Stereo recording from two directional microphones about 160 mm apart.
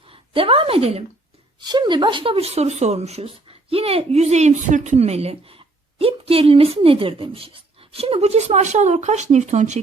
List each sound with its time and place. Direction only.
0.1 s a woman's voice: 35° right (ahead or behind)
1.5 s speech: 30° right (ahead or behind); by 9.8 s 45° right (ahead or behind)